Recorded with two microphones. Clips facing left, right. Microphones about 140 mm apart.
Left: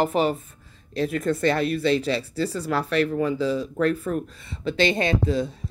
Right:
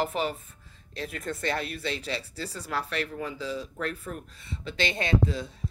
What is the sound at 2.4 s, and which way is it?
Speech, 65° left (ahead or behind).